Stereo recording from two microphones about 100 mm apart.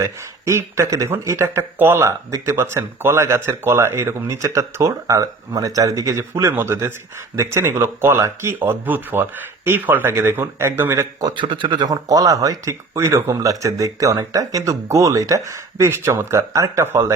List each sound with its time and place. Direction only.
0.0 s speech: 30° right (ahead or behind)
11.3 s speech: 55° right (ahead or behind); by 17.1 s 25° right (ahead or behind)